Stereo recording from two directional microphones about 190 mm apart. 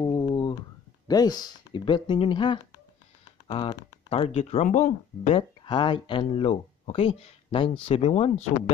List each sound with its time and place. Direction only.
0.0 s a sound: 25° left (ahead or behind)
1.0 s speech: 20° left (ahead or behind); by 5.4 s 40° left (ahead or behind)
5.7 s speech: 25° left (ahead or behind)